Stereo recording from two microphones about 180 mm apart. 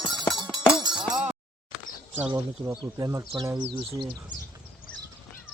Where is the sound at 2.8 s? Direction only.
20° right (ahead or behind).